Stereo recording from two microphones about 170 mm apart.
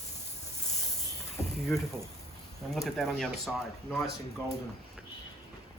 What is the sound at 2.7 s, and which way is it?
Speech, centre (ahead or behind).